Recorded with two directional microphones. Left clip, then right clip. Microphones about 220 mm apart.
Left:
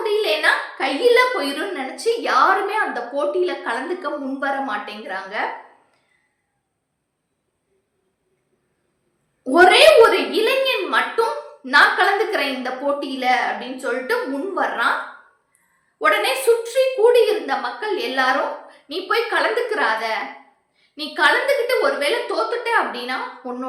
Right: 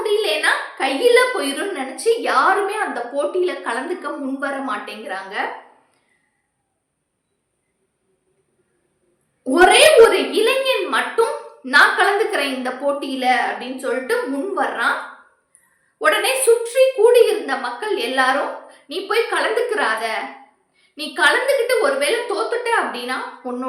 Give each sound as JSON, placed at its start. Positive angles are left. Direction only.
{"t": 0.0, "sound": "a woman's voice", "side_deg": -5}
{"t": 9.4, "sound": "a woman's voice", "side_deg": -5}
{"t": 16.0, "sound": "a woman's voice", "side_deg": -10}